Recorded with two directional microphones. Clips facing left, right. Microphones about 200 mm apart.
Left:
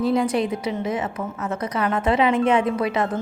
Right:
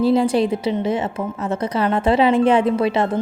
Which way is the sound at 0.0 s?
30° right (ahead or behind).